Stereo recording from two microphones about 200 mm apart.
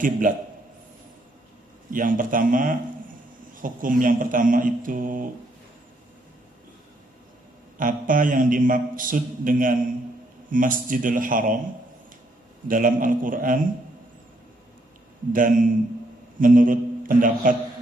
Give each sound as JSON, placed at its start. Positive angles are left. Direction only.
{"t": 0.0, "sound": "a man's voice", "side_deg": -40}
{"t": 1.9, "sound": "a man's voice", "side_deg": -45}
{"t": 7.8, "sound": "a man's voice", "side_deg": -45}
{"t": 12.6, "sound": "a man's voice", "side_deg": -40}
{"t": 15.3, "sound": "a man's voice", "side_deg": -40}